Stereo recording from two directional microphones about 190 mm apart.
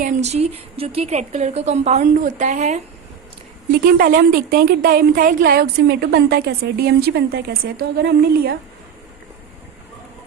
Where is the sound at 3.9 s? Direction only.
50° right (ahead or behind).